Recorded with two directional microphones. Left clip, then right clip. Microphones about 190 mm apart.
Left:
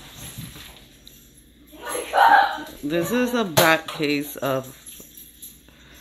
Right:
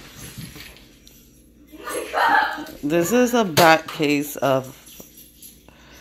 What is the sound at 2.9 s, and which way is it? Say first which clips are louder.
Speech: right 4 dB; 15° right (ahead or behind).